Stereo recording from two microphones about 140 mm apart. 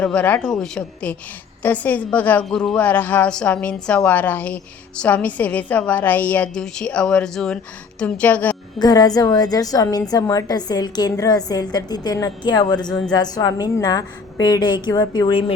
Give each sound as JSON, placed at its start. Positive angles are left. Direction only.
{"t": 0.0, "sound": "a woman's voice", "side_deg": 10}
{"t": 8.8, "sound": "a woman's voice", "side_deg": 25}
{"t": 12.8, "sound": "speech", "side_deg": 5}
{"t": 13.1, "sound": "a woman's voice", "side_deg": 30}